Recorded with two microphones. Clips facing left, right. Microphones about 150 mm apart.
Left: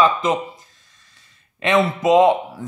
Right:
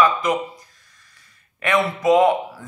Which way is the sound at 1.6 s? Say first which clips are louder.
Left 2 dB; 20° left (ahead or behind).